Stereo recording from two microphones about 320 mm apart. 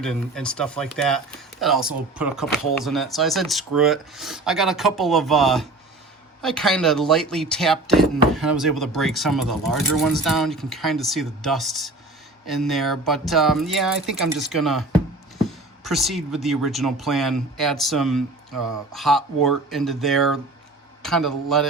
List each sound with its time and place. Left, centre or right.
0.0 s speech: centre
18.5 s speech: right
18.9 s speech: centre